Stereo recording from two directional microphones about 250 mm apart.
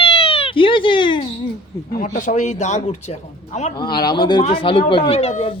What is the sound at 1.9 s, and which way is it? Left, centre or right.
A man's voice, left.